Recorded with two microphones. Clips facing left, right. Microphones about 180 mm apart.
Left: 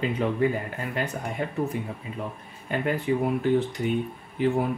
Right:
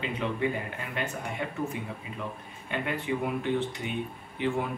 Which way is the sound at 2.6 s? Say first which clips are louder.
Left 5 dB; 40° left (ahead or behind).